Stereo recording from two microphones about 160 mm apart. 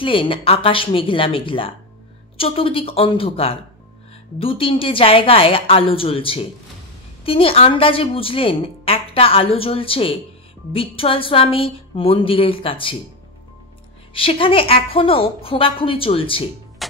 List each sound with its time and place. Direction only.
0.0 s a woman's voice: 35° left (ahead or behind)
14.1 s a woman's voice: 35° left (ahead or behind)